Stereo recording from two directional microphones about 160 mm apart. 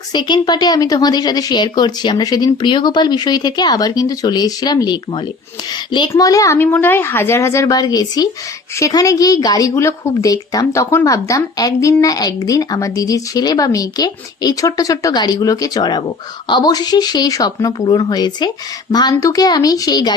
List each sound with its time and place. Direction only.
0.1 s speech: 25° left (ahead or behind)